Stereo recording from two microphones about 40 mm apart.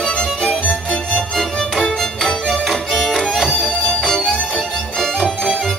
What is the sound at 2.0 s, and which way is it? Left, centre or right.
Music, centre.